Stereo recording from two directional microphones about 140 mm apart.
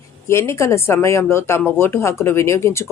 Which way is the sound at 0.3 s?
20° left (ahead or behind).